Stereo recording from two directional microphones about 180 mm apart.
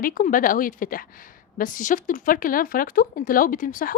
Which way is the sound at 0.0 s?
50° left (ahead or behind).